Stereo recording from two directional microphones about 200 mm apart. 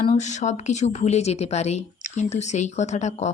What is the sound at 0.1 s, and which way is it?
Speech, 35° left (ahead or behind).